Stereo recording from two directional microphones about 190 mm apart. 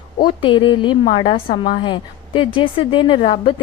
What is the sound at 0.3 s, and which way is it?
A woman's voice, 25° left (ahead or behind).